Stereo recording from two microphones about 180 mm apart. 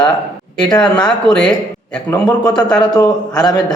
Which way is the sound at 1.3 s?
5° left (ahead or behind).